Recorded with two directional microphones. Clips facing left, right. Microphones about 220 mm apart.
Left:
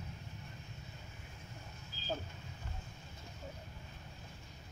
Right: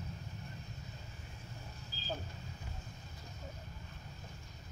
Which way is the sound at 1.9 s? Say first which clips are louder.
Right 2 dB; 35° right (ahead or behind).